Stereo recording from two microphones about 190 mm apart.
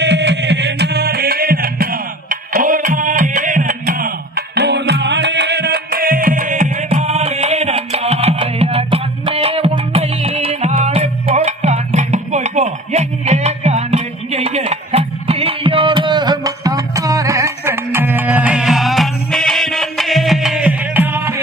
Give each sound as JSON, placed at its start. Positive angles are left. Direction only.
{"t": 0.0, "sound": "music", "side_deg": -65}